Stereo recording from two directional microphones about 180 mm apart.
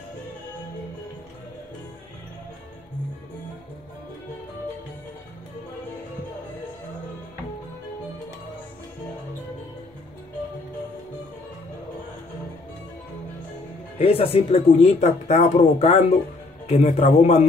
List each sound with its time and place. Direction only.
13.9 s speech: 35° left (ahead or behind)